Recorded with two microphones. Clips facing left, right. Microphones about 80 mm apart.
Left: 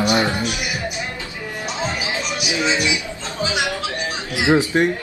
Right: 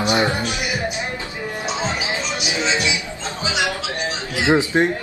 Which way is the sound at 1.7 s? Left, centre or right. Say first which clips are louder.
Even; right.